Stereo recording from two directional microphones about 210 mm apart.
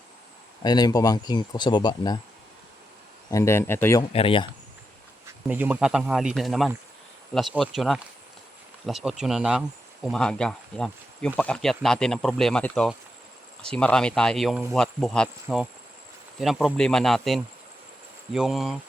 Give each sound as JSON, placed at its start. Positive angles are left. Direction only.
{"t": 0.6, "sound": "speech", "side_deg": 20}
{"t": 3.2, "sound": "speech", "side_deg": 15}
{"t": 4.1, "sound": "speech", "side_deg": 25}
{"t": 5.5, "sound": "speech", "side_deg": -10}